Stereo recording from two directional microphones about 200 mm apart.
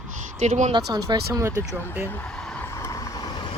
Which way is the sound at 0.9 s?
20° right (ahead or behind).